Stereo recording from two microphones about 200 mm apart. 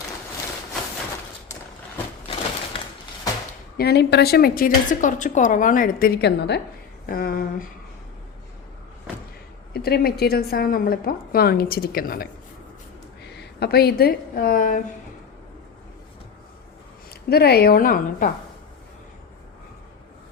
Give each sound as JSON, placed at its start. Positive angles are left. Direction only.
{"t": 3.8, "sound": "a woman's voice", "side_deg": 55}
{"t": 9.7, "sound": "a woman's voice", "side_deg": 50}
{"t": 13.3, "sound": "a woman's voice", "side_deg": 55}
{"t": 17.2, "sound": "a woman's voice", "side_deg": 50}